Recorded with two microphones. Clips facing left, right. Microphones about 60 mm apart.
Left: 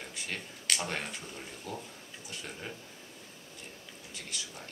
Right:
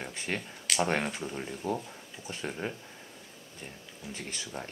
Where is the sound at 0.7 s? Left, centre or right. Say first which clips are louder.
Right 11 dB; right.